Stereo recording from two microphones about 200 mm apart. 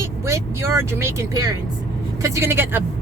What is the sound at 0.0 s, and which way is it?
Speech, 15° right (ahead or behind).